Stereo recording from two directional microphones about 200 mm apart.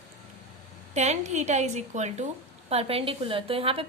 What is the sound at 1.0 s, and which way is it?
A woman's voice, 35° right (ahead or behind).